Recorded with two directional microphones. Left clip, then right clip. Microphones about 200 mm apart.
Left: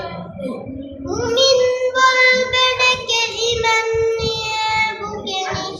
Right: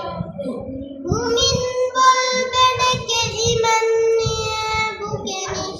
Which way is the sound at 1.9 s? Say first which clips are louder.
Left 2 dB; 25° right (ahead or behind).